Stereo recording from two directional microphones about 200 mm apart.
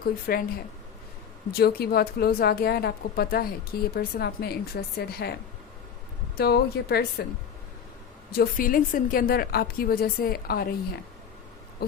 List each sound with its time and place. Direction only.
0.0 s a woman's voice: 50° left (ahead or behind)
1.5 s a woman's voice: 50° left (ahead or behind)
6.3 s a woman's voice: 50° left (ahead or behind)
8.3 s a woman's voice: 45° left (ahead or behind)
11.8 s owl: 50° left (ahead or behind)